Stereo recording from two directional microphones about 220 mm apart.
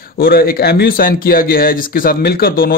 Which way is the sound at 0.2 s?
45° left (ahead or behind).